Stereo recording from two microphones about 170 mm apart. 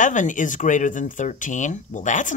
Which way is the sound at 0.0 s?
50° left (ahead or behind).